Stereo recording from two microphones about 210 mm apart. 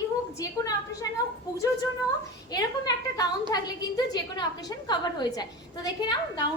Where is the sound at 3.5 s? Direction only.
20° left (ahead or behind).